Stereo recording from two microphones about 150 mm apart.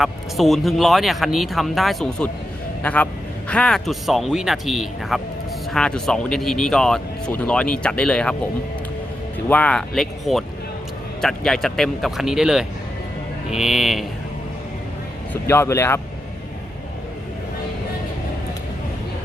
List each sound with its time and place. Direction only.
0.0 s speech: centre (ahead or behind)
9.5 s speech: 10° left (ahead or behind)
15.3 s speech: 15° left (ahead or behind)